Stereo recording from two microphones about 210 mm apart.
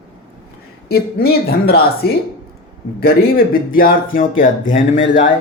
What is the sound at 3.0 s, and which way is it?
Speech, 45° left (ahead or behind).